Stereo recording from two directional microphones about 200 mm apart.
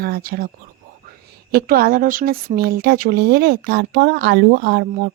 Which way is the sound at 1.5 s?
50° right (ahead or behind).